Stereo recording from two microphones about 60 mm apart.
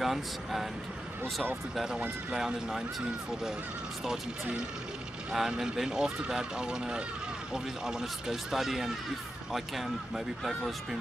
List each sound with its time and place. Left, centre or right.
0.0 s speech: centre
1.2 s speech: right
2.3 s speech: centre
5.3 s speech: centre